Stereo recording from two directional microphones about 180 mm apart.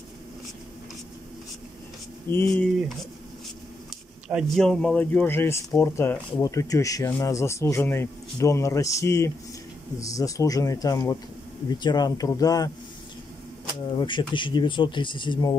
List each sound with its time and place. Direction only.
2.2 s speech: 10° left (ahead or behind)
4.3 s speech: centre (ahead or behind); by 12.7 s 20° left (ahead or behind)
13.8 s speech: 25° left (ahead or behind)